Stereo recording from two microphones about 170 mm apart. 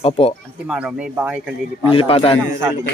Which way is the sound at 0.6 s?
5° right (ahead or behind).